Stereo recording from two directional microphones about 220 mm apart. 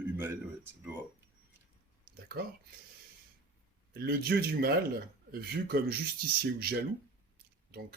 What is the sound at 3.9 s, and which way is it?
Speech, 45° right (ahead or behind).